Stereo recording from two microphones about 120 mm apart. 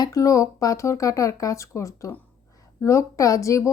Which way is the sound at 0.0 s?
30° left (ahead or behind).